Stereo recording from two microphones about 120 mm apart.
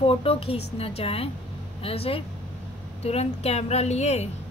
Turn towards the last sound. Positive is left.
turn(degrees=65)  # may be behind; listen again after turning